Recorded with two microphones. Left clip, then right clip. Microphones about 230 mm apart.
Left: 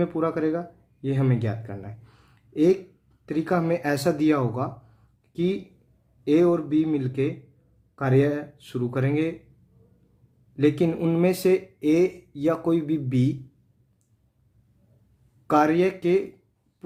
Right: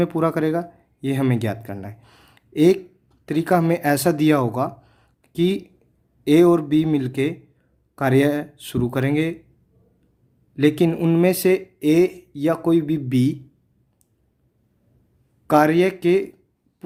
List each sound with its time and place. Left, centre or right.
0.0 s speech: right
10.5 s speech: right
15.4 s speech: right